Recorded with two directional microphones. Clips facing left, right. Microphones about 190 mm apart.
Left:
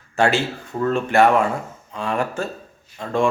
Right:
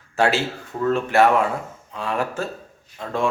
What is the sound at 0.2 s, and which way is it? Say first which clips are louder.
Speech: left 1 dB; 5° right (ahead or behind).